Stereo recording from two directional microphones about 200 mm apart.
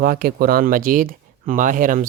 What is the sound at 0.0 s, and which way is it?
Speech, 45° right (ahead or behind).